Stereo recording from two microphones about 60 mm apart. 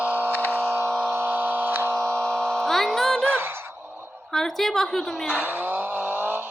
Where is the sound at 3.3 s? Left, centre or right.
Right.